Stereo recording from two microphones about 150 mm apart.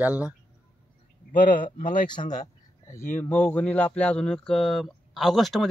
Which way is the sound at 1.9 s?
30° left (ahead or behind).